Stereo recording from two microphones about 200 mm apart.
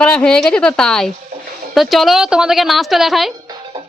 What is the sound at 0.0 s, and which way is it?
Speech, 5° left (ahead or behind).